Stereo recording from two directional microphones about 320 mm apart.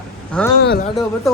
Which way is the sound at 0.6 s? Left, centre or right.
Left.